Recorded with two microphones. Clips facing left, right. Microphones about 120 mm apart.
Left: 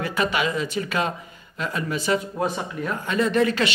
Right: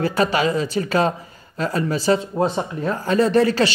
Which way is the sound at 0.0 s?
35° right (ahead or behind).